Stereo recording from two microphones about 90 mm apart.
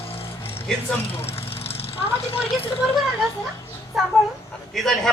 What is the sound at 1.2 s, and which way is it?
Vehicle, 90° left.